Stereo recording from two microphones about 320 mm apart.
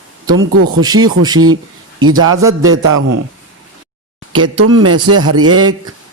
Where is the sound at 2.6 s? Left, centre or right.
Right.